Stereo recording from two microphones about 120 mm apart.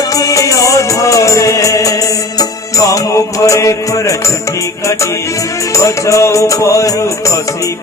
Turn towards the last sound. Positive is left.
turn(degrees=25)  # may be behind; listen again after turning